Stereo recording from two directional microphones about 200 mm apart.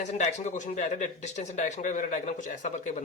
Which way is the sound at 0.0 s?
35° left (ahead or behind).